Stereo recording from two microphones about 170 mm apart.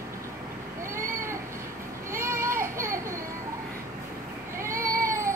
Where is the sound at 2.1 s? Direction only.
15° right (ahead or behind).